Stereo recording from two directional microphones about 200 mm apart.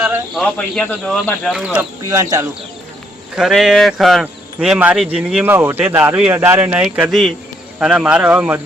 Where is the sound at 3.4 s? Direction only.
Centre (ahead or behind).